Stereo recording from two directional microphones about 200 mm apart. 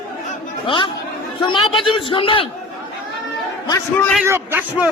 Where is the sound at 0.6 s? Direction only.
25° left (ahead or behind).